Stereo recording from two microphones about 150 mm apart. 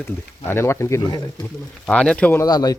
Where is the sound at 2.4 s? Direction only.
25° left (ahead or behind).